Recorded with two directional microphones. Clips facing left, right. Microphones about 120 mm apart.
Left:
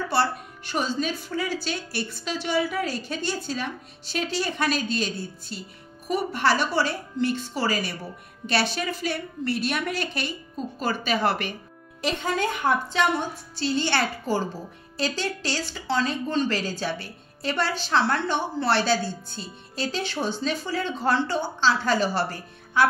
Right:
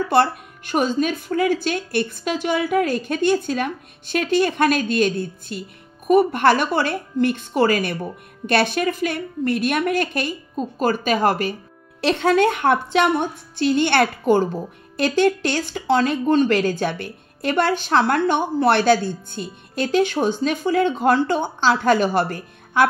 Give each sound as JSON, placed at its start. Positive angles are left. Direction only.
{"t": 0.1, "sound": "speech", "side_deg": -50}
{"t": 12.0, "sound": "a woman's voice", "side_deg": -75}